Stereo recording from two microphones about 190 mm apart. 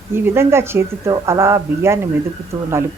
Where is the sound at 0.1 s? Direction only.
15° right (ahead or behind).